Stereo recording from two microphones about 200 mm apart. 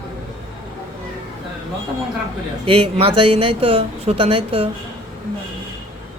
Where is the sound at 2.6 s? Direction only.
25° right (ahead or behind).